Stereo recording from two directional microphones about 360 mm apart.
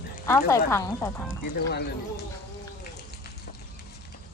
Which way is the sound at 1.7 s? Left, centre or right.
Left.